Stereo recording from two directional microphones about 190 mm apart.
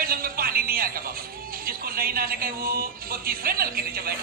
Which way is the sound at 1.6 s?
50° right (ahead or behind).